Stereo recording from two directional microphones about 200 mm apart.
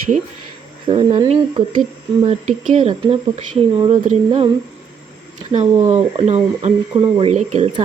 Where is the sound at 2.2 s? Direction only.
35° right (ahead or behind).